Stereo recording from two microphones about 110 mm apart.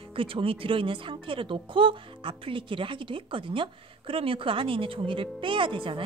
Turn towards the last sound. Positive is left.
turn(degrees=-50)  # may be behind; listen again after turning